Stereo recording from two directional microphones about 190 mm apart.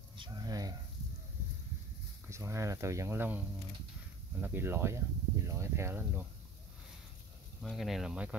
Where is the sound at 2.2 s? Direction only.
15° right (ahead or behind).